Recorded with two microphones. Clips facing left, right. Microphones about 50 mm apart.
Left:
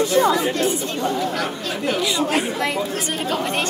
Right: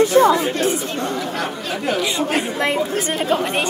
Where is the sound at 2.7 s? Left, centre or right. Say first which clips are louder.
Right 3 dB; centre.